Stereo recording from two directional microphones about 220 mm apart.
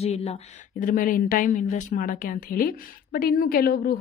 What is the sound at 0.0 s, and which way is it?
A woman's voice, 30° left (ahead or behind).